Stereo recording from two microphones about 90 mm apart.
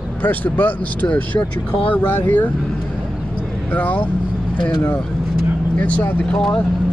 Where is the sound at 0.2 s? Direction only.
20° left (ahead or behind).